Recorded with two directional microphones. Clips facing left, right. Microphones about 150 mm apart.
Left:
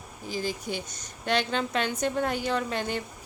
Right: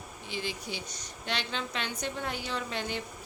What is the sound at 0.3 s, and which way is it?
A woman's voice, 40° left (ahead or behind).